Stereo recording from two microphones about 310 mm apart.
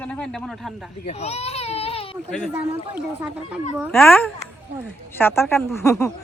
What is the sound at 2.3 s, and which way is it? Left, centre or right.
Speech, centre.